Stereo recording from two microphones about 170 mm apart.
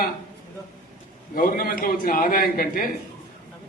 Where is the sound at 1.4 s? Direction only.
55° left (ahead or behind).